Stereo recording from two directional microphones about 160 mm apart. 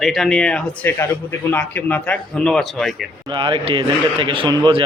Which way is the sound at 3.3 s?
30° right (ahead or behind).